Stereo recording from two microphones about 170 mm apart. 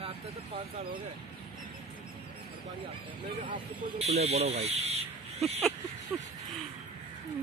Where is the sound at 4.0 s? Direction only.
40° right (ahead or behind).